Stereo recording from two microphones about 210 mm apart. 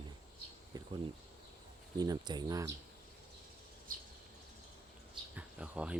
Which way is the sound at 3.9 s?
40° right (ahead or behind).